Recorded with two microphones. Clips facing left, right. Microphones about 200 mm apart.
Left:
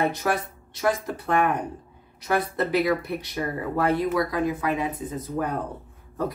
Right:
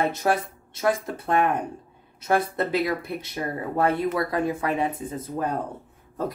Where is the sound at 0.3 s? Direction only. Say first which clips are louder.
Right 2 dB; 25° right (ahead or behind).